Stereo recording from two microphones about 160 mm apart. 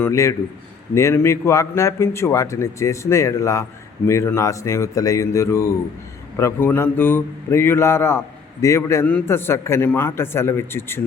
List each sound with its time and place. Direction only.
0.0 s a man's voice: 20° left (ahead or behind)